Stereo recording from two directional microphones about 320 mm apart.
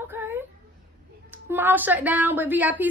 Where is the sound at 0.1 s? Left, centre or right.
Centre.